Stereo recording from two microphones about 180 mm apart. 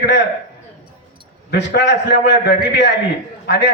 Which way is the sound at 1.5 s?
70° left (ahead or behind).